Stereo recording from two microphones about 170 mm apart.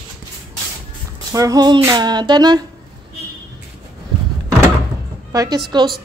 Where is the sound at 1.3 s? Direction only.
20° right (ahead or behind).